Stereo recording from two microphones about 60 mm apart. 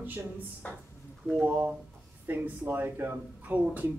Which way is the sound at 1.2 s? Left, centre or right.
Right.